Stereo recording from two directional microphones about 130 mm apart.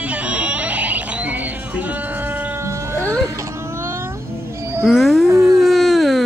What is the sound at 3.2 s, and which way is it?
Baby cry, 20° right (ahead or behind).